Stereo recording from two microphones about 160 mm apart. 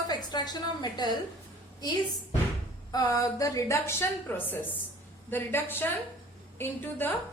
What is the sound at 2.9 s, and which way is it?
A woman's voice, 20° left (ahead or behind).